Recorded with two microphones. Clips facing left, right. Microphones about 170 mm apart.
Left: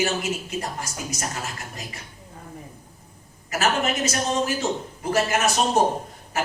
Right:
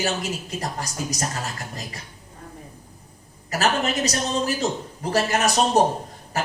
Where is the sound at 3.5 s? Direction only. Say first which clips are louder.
Right 1 dB; 35° right (ahead or behind).